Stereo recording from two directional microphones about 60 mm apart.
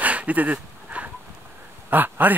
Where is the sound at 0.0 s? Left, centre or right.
Right.